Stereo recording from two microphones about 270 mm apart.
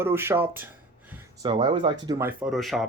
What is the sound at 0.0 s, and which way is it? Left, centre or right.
Speech, centre.